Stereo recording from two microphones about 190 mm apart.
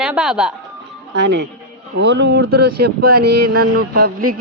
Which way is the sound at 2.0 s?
65° right (ahead or behind).